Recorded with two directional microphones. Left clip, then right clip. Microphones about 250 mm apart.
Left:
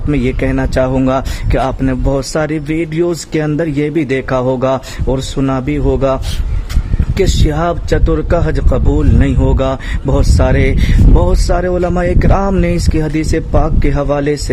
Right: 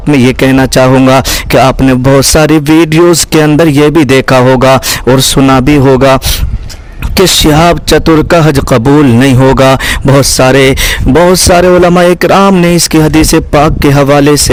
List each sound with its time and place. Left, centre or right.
0.1 s speech: right
7.2 s speech: right